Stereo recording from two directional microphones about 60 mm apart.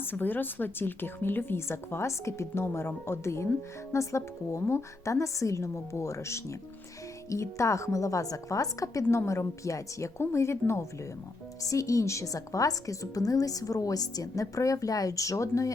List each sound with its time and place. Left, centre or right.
0.0 s a woman's voice: left
9.0 s a woman's voice: left
11.6 s a woman's voice: left